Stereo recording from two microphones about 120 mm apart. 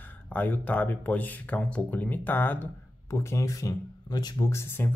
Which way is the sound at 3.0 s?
25° left (ahead or behind).